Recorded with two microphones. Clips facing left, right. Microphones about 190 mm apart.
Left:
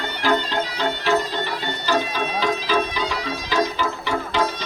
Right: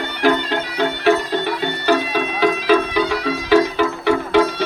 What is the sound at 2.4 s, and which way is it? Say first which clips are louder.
Music: right 7 dB; 60° right (ahead or behind).